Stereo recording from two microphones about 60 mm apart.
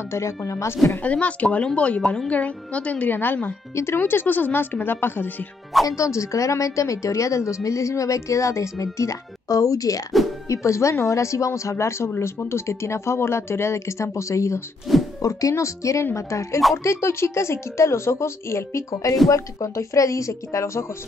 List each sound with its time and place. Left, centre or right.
0.5 s a woman's voice: left
1.0 s a woman's voice: left
3.7 s speech: left
5.9 s a woman's voice: left
10.5 s a woman's voice: left
14.9 s a sound: centre
15.2 s a woman's voice: left